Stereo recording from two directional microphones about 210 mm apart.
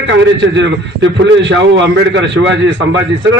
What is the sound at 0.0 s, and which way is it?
A man's voice, 55° right (ahead or behind).